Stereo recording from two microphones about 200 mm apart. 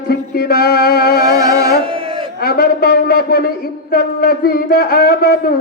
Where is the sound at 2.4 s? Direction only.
50° left (ahead or behind).